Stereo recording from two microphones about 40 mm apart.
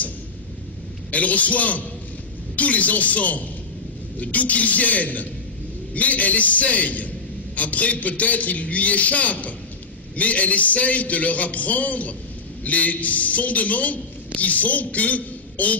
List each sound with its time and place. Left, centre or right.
1.1 s a man's voice: left